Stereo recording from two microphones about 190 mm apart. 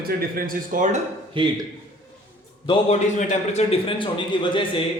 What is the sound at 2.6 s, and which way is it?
A man's voice, 35° left (ahead or behind).